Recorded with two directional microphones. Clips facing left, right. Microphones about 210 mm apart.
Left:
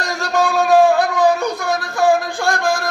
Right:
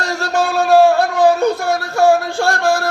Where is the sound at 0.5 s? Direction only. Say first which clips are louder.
Right 2 dB; 15° left (ahead or behind).